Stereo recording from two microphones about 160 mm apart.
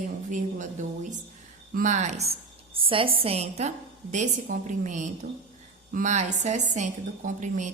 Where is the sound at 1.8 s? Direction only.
50° right (ahead or behind).